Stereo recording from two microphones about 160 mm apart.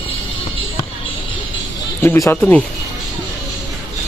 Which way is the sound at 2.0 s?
15° left (ahead or behind).